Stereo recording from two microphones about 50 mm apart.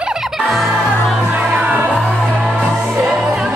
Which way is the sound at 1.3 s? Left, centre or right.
Right.